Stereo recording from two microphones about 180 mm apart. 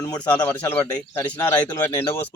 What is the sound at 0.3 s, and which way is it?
Speech, 10° left (ahead or behind).